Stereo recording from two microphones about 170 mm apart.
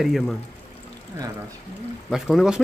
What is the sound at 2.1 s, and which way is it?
Speech, centre (ahead or behind).